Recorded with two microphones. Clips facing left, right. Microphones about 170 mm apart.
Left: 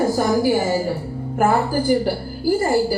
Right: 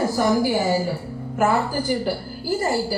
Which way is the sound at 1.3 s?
50° left (ahead or behind).